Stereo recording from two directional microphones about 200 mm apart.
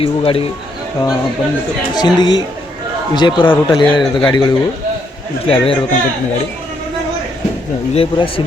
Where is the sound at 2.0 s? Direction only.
20° left (ahead or behind).